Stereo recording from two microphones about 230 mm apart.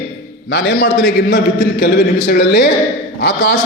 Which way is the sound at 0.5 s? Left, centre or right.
Left.